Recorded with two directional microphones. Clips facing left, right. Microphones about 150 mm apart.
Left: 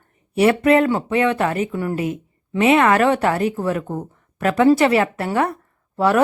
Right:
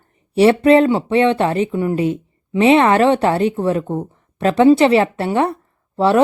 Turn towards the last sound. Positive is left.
turn(degrees=-25)  # may be behind; listen again after turning